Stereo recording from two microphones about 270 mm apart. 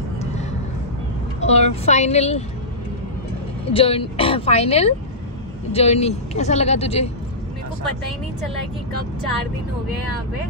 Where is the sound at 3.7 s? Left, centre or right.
Left.